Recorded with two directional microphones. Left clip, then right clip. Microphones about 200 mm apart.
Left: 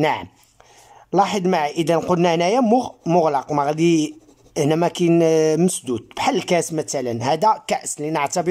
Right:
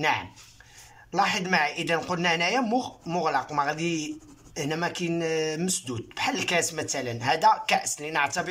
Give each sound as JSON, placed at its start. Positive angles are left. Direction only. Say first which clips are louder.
{"t": 0.0, "sound": "speech", "louder": "left 5 dB", "side_deg": 35}